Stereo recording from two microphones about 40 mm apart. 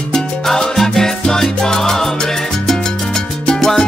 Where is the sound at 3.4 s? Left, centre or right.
Centre.